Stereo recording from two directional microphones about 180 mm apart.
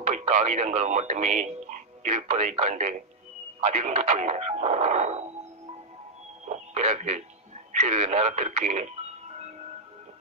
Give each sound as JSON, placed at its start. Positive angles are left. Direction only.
{"t": 0.0, "sound": "speech", "side_deg": -40}
{"t": 6.5, "sound": "music", "side_deg": -40}
{"t": 7.7, "sound": "speech", "side_deg": -35}